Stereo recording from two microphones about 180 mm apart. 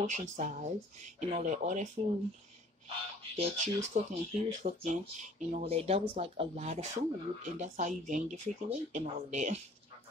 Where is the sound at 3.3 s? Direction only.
40° right (ahead or behind).